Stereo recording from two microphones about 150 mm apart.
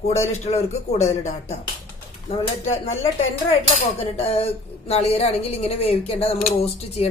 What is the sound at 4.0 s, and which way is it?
Speech, 40° left (ahead or behind).